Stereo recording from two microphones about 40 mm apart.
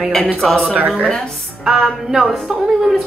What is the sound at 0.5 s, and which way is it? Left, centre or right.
Speech, centre.